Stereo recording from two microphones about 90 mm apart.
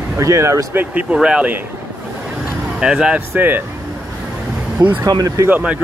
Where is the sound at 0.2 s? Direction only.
35° right (ahead or behind).